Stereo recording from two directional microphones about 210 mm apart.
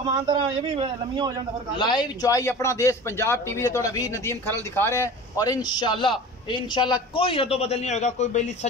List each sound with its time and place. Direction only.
0.0 s a man's voice: 20° right (ahead or behind)
1.8 s a man's voice: 20° left (ahead or behind)